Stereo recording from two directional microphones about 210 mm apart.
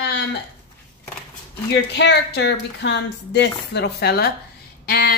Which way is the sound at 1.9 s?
55° left (ahead or behind).